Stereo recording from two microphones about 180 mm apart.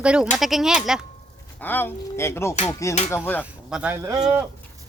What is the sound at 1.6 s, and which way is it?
Speech, 10° left (ahead or behind).